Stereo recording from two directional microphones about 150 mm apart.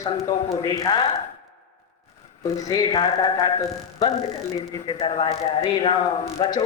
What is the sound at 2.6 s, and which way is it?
Speech, 25° left (ahead or behind).